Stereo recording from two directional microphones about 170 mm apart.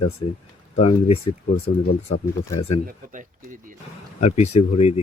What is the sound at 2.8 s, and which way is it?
Speech, 50° right (ahead or behind).